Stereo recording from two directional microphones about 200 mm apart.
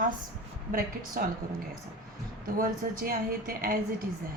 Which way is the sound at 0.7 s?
45° right (ahead or behind).